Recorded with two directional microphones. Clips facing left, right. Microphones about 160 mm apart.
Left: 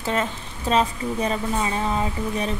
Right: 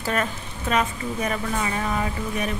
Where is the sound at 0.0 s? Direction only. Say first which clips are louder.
Left 1 dB; 20° left (ahead or behind).